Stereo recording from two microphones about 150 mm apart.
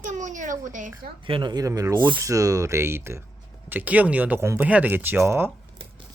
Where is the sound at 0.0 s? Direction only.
55° right (ahead or behind).